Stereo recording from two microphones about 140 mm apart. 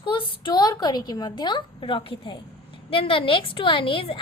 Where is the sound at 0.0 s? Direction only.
35° left (ahead or behind).